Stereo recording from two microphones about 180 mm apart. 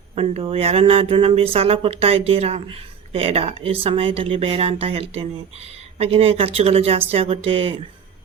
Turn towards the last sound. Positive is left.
turn(degrees=-30)  # may be behind; listen again after turning